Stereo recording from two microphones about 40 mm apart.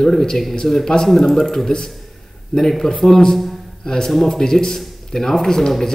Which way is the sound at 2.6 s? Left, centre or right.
Centre.